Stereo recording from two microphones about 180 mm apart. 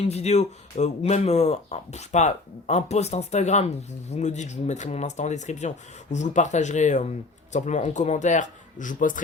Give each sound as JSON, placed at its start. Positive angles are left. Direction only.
{"t": 0.0, "sound": "speech", "side_deg": 35}